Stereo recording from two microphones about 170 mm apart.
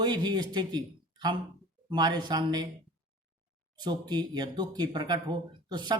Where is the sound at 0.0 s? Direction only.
25° right (ahead or behind).